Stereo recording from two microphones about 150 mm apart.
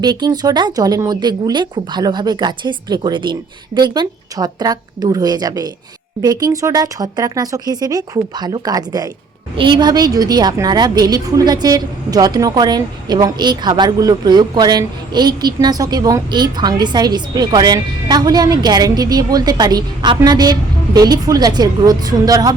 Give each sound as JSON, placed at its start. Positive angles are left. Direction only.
{"t": 0.0, "sound": "a woman's voice", "side_deg": -30}